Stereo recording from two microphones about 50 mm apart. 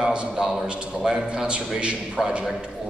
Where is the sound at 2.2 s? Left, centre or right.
Centre.